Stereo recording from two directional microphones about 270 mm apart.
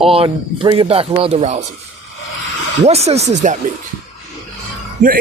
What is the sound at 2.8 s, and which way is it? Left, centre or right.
Speech, right.